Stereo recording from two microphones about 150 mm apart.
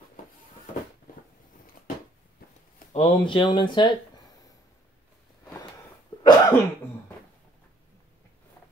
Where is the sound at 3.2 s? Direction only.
35° left (ahead or behind).